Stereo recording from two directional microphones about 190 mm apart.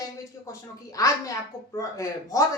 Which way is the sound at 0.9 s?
15° left (ahead or behind).